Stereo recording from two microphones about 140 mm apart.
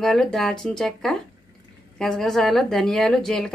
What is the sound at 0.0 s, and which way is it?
A woman's voice, centre (ahead or behind).